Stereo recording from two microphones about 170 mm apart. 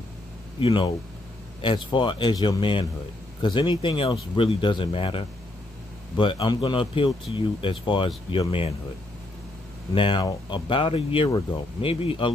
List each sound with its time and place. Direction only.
0.6 s speech: 30° left (ahead or behind)
9.9 s speech: 30° left (ahead or behind)